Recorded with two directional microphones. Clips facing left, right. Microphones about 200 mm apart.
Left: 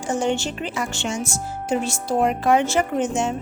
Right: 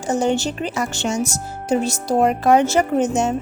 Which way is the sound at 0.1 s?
40° right (ahead or behind).